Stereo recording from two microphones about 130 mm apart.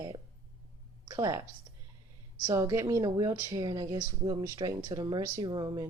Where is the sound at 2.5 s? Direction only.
25° right (ahead or behind).